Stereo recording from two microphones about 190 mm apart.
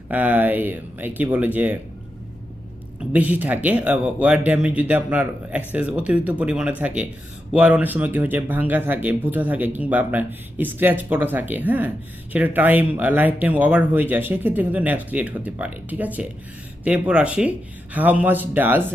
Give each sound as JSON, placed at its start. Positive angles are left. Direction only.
{"t": 0.1, "sound": "speech", "side_deg": -10}
{"t": 3.0, "sound": "speech", "side_deg": -10}